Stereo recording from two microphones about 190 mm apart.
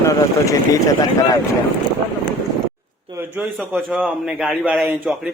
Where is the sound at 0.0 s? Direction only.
15° left (ahead or behind).